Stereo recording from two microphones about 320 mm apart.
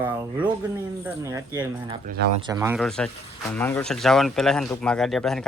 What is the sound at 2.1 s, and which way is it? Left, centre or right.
Speech, right.